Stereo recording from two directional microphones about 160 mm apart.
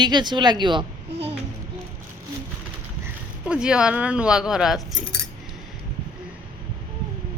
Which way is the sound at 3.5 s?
5° right (ahead or behind).